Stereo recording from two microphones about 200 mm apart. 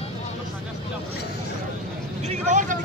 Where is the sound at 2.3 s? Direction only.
40° right (ahead or behind).